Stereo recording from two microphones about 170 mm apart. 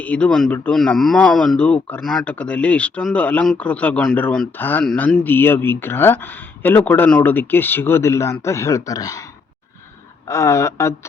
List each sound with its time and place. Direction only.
0.0 s speech: 10° left (ahead or behind)
10.2 s speech: 15° left (ahead or behind)